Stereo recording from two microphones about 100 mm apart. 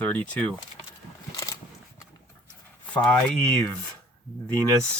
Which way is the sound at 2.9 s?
15° left (ahead or behind).